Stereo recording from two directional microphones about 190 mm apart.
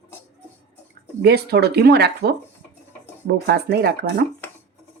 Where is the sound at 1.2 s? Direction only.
60° right (ahead or behind).